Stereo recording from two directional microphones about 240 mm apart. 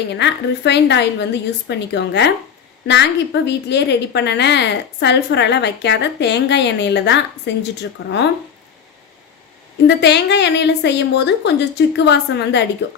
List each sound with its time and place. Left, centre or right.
0.1 s a woman's voice: left
9.8 s a woman's voice: left